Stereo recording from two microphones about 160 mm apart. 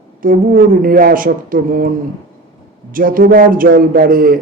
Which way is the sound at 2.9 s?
60° right (ahead or behind).